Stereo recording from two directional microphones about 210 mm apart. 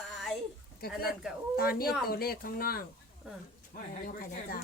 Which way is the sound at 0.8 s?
45° left (ahead or behind).